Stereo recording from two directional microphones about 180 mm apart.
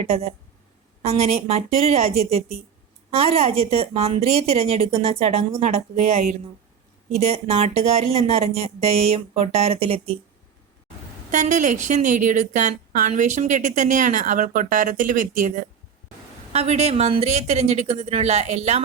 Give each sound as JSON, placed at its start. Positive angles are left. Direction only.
{"t": 0.0, "sound": "a woman's voice", "side_deg": -40}
{"t": 11.3, "sound": "a woman's voice", "side_deg": -45}